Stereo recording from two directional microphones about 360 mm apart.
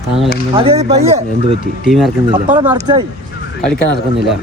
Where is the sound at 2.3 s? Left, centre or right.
Centre.